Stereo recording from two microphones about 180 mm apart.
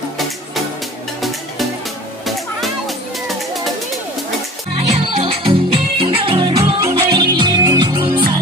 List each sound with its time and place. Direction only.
2.2 s music: centre (ahead or behind)
4.7 s music: 30° right (ahead or behind)